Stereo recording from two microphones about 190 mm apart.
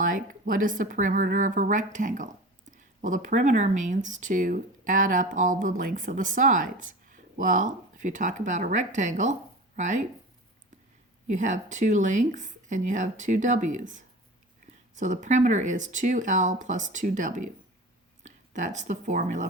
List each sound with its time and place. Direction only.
0.0 s speech: 45° right (ahead or behind)
11.3 s speech: 40° right (ahead or behind)